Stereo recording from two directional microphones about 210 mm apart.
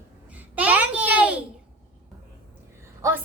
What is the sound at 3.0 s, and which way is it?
Speech, 10° right (ahead or behind).